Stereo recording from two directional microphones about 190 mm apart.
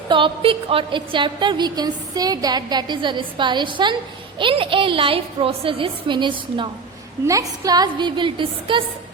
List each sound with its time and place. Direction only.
0.1 s a woman's voice: 25° right (ahead or behind)